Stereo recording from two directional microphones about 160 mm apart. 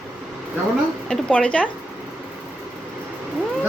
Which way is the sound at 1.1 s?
5° left (ahead or behind).